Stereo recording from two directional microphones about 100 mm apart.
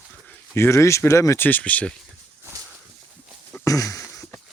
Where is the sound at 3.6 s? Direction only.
35° left (ahead or behind).